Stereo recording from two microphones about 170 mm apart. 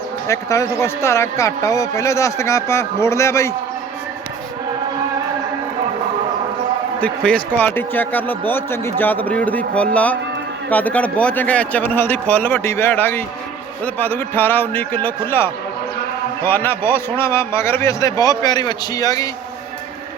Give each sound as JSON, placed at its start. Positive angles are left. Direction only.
{"t": 0.3, "sound": "speech", "side_deg": 15}
{"t": 7.0, "sound": "speech", "side_deg": 10}